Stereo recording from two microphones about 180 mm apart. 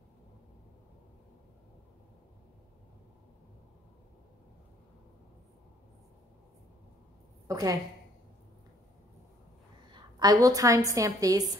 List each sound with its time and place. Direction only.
7.4 s a woman's voice: 20° right (ahead or behind)
9.9 s a woman's voice: 20° right (ahead or behind)